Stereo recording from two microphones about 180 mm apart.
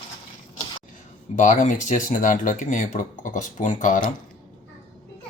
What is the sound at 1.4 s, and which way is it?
Speech, 45° left (ahead or behind).